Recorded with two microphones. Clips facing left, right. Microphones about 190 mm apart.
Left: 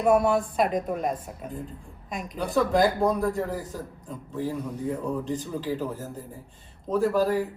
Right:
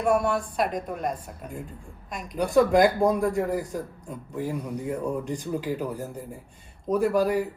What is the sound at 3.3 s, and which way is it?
Speech, 15° right (ahead or behind).